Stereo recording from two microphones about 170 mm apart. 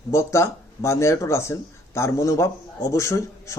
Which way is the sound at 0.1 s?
15° left (ahead or behind).